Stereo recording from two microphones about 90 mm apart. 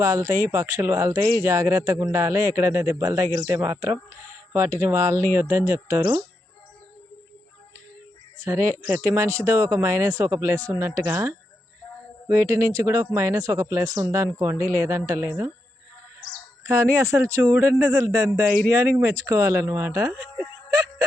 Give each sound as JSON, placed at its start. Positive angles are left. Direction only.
{"t": 0.0, "sound": "speech", "side_deg": -35}
{"t": 8.4, "sound": "speech", "side_deg": -30}
{"t": 16.6, "sound": "speech", "side_deg": -30}